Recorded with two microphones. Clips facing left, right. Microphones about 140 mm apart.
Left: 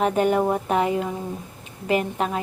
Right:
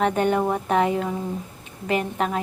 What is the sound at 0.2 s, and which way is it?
Speech, 20° left (ahead or behind).